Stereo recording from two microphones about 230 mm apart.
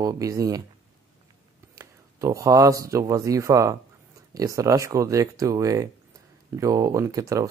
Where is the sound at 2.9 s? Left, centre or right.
Centre.